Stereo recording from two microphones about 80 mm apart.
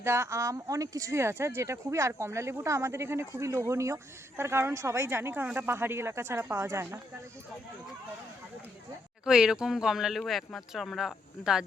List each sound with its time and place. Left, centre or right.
0.0 s speech: right
9.2 s speech: centre